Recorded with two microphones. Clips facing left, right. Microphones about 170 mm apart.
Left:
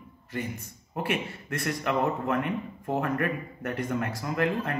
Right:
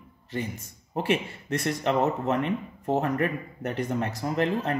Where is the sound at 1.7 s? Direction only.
20° right (ahead or behind).